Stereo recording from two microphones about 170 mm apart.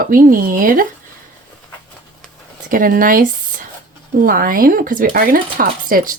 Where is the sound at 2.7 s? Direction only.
55° right (ahead or behind).